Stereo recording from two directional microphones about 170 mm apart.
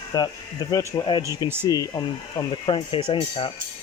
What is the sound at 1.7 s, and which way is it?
Speech, 20° left (ahead or behind).